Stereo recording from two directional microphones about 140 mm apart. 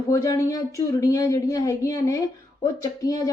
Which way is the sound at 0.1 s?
20° left (ahead or behind).